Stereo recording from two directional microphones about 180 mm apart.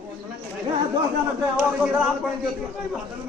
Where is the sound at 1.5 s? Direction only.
5° right (ahead or behind).